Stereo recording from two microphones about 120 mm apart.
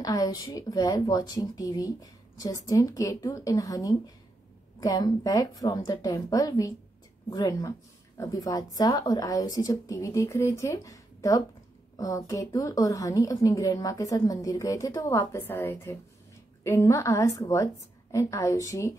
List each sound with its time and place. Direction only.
0.0 s a woman's voice: 30° left (ahead or behind)